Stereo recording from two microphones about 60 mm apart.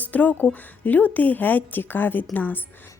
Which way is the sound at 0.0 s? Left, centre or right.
Left.